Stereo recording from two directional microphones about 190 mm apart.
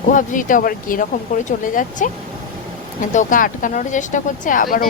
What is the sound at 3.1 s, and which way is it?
Speech, 40° left (ahead or behind).